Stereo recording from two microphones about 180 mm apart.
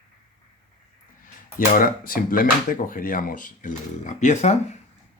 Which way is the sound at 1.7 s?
50° left (ahead or behind).